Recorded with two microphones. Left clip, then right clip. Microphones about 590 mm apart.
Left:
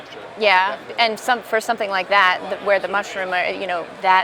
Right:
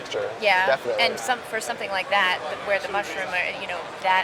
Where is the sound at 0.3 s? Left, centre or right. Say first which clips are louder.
Left 4 dB; left.